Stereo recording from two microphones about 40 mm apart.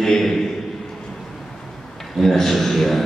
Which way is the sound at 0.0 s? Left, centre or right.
Centre.